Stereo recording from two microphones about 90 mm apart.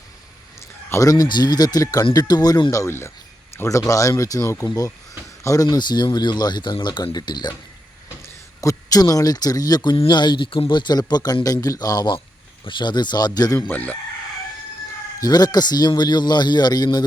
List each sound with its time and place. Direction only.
0.9 s a sound: 35° left (ahead or behind)
1.1 s a man's voice: 50° left (ahead or behind)
5.6 s speech: 55° left (ahead or behind)
7.0 s a man's voice: 45° left (ahead or behind)
8.2 s a man's voice: 40° left (ahead or behind)
13.6 s speech: 20° left (ahead or behind)
15.2 s a man's voice: 45° left (ahead or behind)